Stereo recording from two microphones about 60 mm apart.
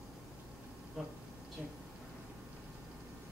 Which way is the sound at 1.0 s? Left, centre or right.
Centre.